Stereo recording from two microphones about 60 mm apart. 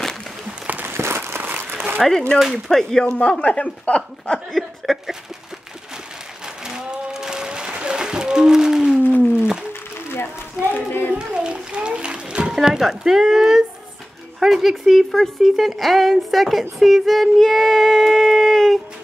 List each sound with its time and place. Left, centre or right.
0.7 s a sound: right
0.9 s a sound: right
2.0 s speech: centre
2.3 s speech: centre
2.7 s speech: centre
4.5 s speech: centre
6.6 s music: centre
9.3 s a sound: centre
9.7 s a sound: left
10.6 s speech: left
11.1 s children playing: centre
12.5 s speech: centre